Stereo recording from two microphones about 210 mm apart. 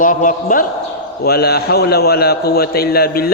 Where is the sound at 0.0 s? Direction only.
40° left (ahead or behind).